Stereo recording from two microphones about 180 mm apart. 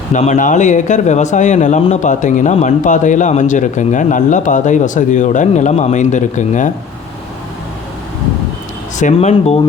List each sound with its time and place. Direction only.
0.1 s speech: 40° left (ahead or behind)
9.0 s speech: 40° left (ahead or behind)